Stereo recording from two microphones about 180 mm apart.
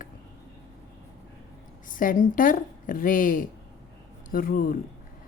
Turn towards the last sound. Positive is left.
turn(degrees=50)  # may be behind; listen again after turning